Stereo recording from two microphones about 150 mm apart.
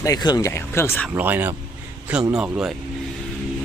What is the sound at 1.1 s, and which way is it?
Speech, 15° right (ahead or behind).